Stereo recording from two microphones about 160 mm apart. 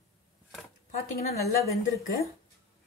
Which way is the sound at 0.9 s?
45° left (ahead or behind).